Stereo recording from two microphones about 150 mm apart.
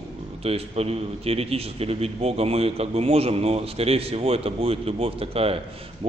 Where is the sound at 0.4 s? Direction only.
40° right (ahead or behind).